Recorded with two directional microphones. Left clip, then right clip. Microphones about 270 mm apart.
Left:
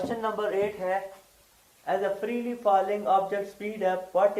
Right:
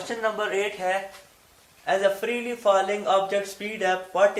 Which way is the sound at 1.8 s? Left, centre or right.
Right.